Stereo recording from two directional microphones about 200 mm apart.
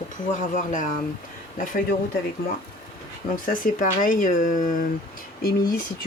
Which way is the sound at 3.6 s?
40° left (ahead or behind).